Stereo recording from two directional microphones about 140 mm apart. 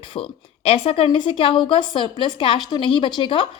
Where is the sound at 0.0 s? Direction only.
40° left (ahead or behind).